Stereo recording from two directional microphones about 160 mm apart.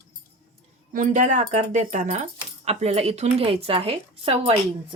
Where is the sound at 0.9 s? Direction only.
55° right (ahead or behind); by 4.5 s 35° right (ahead or behind).